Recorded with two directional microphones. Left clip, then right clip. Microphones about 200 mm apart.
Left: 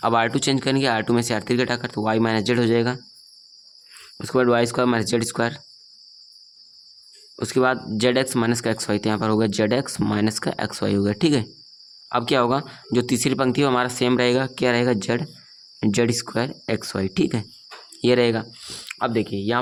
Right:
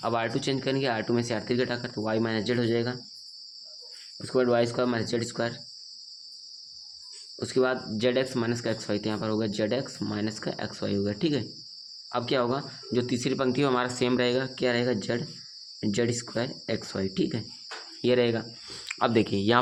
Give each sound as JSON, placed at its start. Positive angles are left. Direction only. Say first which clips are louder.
{"t": 0.0, "sound": "speech", "louder": "left 8 dB", "side_deg": 45}
{"t": 4.2, "sound": "speech", "louder": "left 5 dB", "side_deg": 45}
{"t": 7.3, "sound": "speech", "louder": "left 6 dB", "side_deg": 45}
{"t": 18.7, "sound": "speech", "louder": "left 1 dB", "side_deg": 15}